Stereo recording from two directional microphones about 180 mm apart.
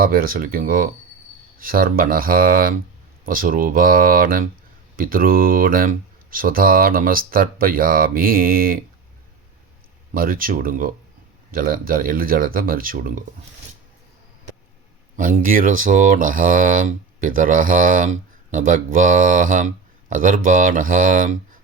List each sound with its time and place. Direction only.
0.0 s speech: 55° right (ahead or behind)
10.2 s speech: 50° right (ahead or behind)
15.1 s speech: 50° right (ahead or behind)